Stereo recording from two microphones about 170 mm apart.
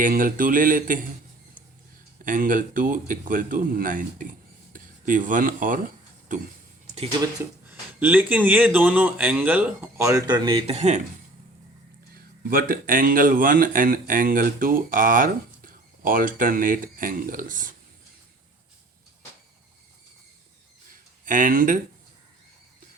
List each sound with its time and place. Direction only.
0.0 s speech: 55° right (ahead or behind)
2.2 s speech: 50° right (ahead or behind)
7.7 s speech: 10° right (ahead or behind); by 11.0 s 40° right (ahead or behind)
12.1 s speech: 60° right (ahead or behind)
21.2 s speech: 50° right (ahead or behind)